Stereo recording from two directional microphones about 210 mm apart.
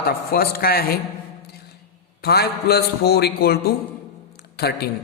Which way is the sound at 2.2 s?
50° left (ahead or behind).